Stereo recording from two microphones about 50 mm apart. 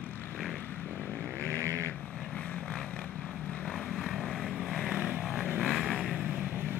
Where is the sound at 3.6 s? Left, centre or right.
Centre.